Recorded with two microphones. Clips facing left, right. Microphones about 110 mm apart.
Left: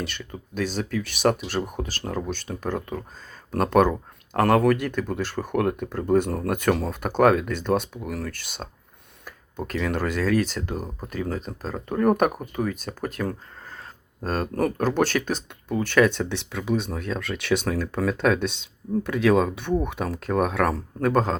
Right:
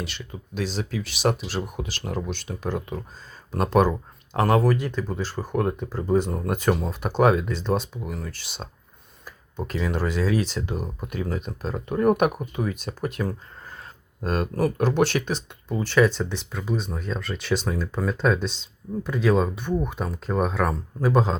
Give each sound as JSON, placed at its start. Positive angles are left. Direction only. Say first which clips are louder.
{"t": 0.0, "sound": "speech", "louder": "left 2 dB", "side_deg": 50}
{"t": 7.0, "sound": "speech", "louder": "left 1 dB", "side_deg": 50}
{"t": 9.6, "sound": "speech", "louder": "left 1 dB", "side_deg": 55}
{"t": 21.1, "sound": "speech", "louder": "even", "side_deg": 50}